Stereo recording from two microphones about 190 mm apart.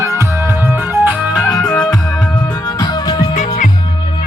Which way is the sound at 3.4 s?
45° left (ahead or behind).